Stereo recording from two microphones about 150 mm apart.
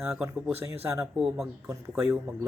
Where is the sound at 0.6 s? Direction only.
15° right (ahead or behind).